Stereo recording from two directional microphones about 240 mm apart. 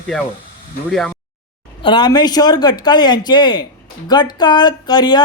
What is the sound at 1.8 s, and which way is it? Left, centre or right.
Speech, centre.